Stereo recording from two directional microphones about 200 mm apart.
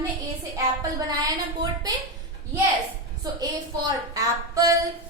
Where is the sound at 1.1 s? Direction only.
20° right (ahead or behind).